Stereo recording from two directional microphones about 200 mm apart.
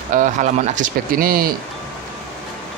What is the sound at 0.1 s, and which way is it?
Speech, 40° right (ahead or behind).